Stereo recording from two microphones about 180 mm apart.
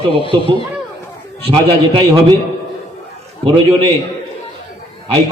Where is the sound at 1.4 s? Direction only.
30° right (ahead or behind).